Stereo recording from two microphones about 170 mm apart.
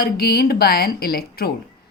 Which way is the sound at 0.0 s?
65° left (ahead or behind).